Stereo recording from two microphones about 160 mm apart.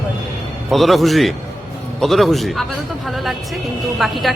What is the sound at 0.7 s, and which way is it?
A woman's voice, centre (ahead or behind).